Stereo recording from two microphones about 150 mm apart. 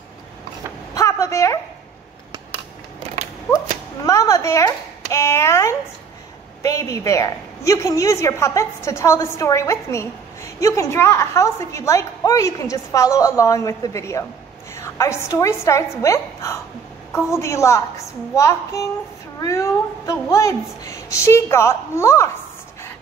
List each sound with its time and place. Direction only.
0.9 s a sound: 20° left (ahead or behind)
3.5 s whip: 20° left (ahead or behind)
6.6 s a woman's voice: 20° left (ahead or behind)